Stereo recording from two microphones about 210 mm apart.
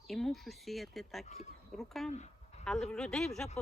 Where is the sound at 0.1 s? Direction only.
Centre (ahead or behind).